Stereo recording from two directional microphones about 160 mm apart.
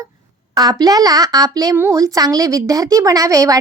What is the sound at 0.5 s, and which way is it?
A woman's voice, 25° right (ahead or behind).